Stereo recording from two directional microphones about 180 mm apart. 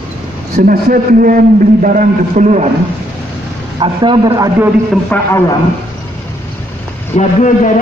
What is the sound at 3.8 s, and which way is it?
Speech, 25° right (ahead or behind).